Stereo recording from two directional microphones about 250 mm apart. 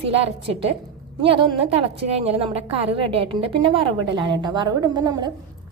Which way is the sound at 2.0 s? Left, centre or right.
Right.